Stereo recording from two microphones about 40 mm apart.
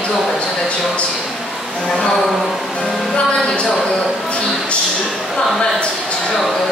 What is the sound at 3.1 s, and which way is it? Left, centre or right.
Speech, left.